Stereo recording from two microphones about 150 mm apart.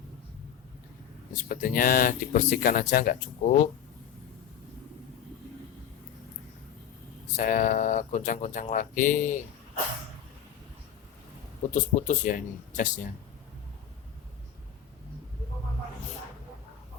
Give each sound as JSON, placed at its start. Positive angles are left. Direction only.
{"t": 1.4, "sound": "speech", "side_deg": 70}
{"t": 7.3, "sound": "speech", "side_deg": 60}
{"t": 11.7, "sound": "speech", "side_deg": 55}